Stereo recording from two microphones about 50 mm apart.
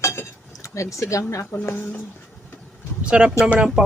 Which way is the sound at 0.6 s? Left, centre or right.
Left.